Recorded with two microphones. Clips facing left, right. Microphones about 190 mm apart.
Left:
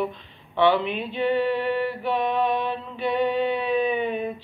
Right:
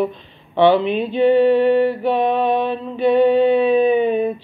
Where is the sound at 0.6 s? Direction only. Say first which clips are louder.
Right 7 dB; 25° right (ahead or behind).